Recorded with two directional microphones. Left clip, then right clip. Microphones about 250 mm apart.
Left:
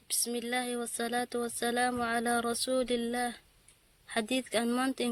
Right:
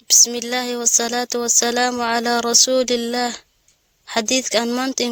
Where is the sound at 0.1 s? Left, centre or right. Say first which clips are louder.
Right 17 dB; right.